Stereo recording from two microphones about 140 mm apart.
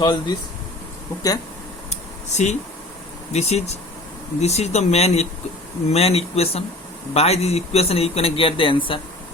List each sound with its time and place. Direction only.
0.0 s speech: 30° left (ahead or behind)
1.9 s a sound: 55° left (ahead or behind)
3.3 s speech: 50° left (ahead or behind)